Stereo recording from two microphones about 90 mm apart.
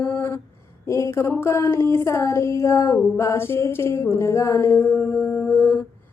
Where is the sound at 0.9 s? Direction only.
35° left (ahead or behind).